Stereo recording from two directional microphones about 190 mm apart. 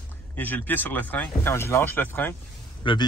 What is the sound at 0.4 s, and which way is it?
Speech, 10° left (ahead or behind).